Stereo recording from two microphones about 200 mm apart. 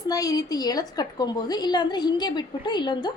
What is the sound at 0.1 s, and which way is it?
A woman's voice, 20° left (ahead or behind).